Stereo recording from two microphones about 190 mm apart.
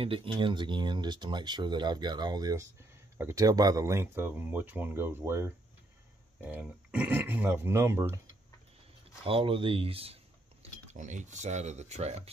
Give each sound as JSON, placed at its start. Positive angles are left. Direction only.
{"t": 0.0, "sound": "speech", "side_deg": -30}
{"t": 9.2, "sound": "speech", "side_deg": -30}